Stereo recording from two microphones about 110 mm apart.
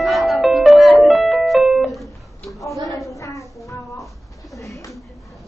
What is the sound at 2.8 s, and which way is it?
Child singing, 30° left (ahead or behind).